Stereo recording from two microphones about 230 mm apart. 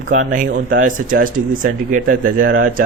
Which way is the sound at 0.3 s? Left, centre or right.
Right.